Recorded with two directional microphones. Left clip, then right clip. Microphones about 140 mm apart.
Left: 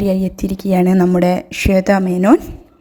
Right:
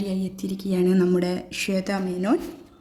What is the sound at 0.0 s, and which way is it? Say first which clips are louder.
Speech: left 12 dB; 65° left (ahead or behind).